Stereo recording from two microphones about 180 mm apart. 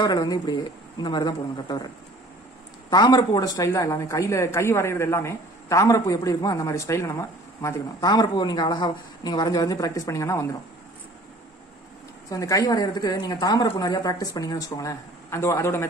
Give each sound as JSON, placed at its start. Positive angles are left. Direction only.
{"t": 0.0, "sound": "speech", "side_deg": 20}
{"t": 2.9, "sound": "a woman's voice", "side_deg": 20}
{"t": 12.3, "sound": "a woman's voice", "side_deg": 20}